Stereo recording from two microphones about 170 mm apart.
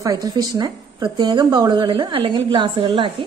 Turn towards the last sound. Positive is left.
turn(degrees=-30)  # may be behind; listen again after turning